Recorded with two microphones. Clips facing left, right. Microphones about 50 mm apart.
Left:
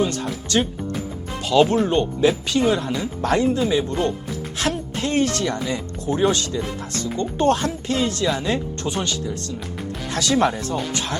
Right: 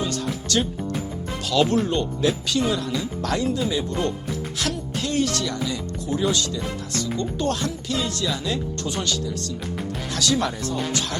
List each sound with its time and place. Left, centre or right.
0.4 s speech: left
1.4 s music: left
1.7 s speech: left